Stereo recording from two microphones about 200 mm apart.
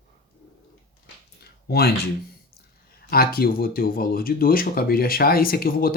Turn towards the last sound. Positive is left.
turn(degrees=45)  # may be behind; listen again after turning